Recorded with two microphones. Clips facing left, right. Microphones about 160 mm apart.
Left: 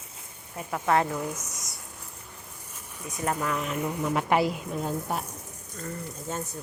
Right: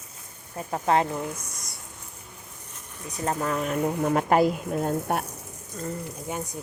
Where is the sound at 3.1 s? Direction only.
35° right (ahead or behind); by 5.2 s 55° right (ahead or behind).